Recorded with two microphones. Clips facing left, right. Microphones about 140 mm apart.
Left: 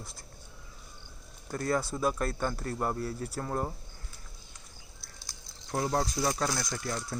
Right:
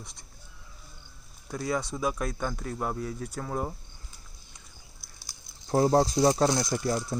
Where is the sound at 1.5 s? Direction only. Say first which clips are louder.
Even; centre (ahead or behind).